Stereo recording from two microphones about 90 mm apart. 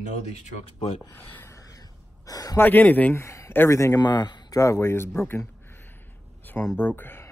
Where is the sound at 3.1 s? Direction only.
30° left (ahead or behind).